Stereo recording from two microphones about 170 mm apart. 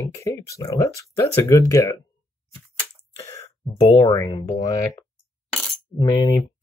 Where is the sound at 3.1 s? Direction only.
20° left (ahead or behind).